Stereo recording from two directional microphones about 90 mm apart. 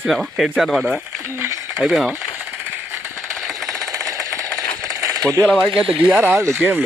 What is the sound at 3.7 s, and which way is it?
Jackhammer, 35° right (ahead or behind).